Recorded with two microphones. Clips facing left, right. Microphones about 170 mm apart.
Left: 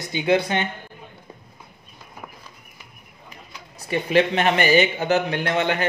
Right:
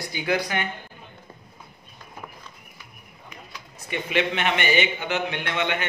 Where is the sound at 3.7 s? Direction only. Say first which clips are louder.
Left 6 dB; 35° left (ahead or behind).